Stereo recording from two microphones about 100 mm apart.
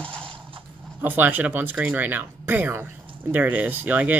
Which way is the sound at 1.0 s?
20° right (ahead or behind).